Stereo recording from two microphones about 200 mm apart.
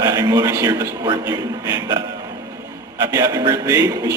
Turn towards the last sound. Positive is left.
turn(degrees=-15)  # may be behind; listen again after turning